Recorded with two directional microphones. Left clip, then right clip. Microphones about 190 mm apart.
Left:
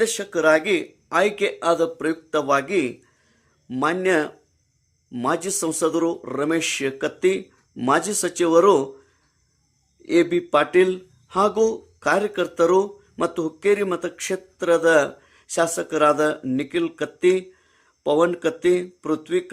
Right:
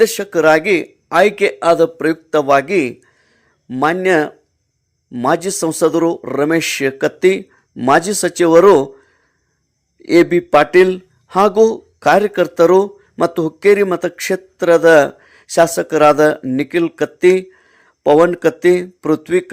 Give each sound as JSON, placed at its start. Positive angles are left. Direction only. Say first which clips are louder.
{"t": 0.0, "sound": "speech", "louder": "right 8 dB", "side_deg": -35}